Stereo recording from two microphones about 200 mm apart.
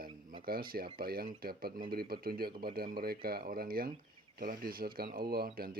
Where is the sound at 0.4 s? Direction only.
45° right (ahead or behind).